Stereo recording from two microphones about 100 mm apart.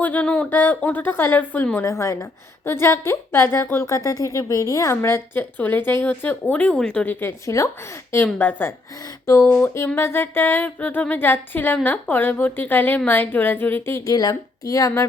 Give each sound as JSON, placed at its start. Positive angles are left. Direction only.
{"t": 0.0, "sound": "a woman's voice", "side_deg": 15}
{"t": 1.8, "sound": "a woman's voice", "side_deg": 30}
{"t": 8.1, "sound": "a woman's voice", "side_deg": 15}
{"t": 9.2, "sound": "a woman's voice", "side_deg": 30}
{"t": 14.0, "sound": "a woman's voice", "side_deg": 40}